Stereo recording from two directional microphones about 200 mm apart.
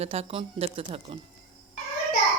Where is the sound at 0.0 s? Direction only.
30° right (ahead or behind).